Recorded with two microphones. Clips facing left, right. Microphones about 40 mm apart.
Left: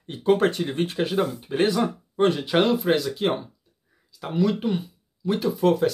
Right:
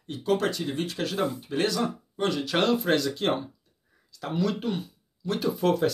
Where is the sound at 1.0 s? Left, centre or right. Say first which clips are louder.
Left 4 dB; left.